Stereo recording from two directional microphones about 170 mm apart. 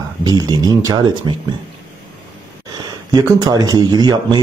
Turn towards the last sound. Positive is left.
turn(degrees=-25)  # may be behind; listen again after turning